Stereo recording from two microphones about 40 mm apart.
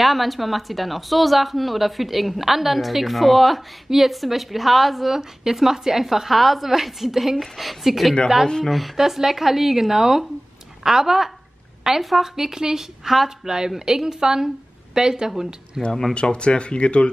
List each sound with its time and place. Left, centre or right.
0.0 s a woman's voice: centre
12.4 s a woman's voice: centre
15.9 s speech: centre
16.2 s speech: left